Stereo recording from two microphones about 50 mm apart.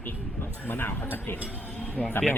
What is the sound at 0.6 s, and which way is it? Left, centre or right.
Speech, left.